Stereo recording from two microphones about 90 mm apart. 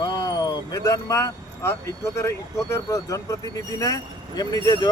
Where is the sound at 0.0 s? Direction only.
45° left (ahead or behind).